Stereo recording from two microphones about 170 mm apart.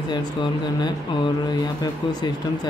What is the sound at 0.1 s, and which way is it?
Speech, 25° left (ahead or behind).